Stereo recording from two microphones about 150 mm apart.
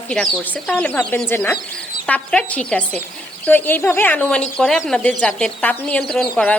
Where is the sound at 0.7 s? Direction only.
10° left (ahead or behind).